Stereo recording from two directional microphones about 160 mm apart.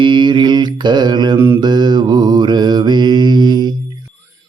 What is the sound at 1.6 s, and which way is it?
Mantra, 25° right (ahead or behind).